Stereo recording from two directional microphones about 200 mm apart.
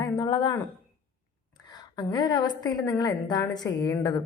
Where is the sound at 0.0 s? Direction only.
20° left (ahead or behind).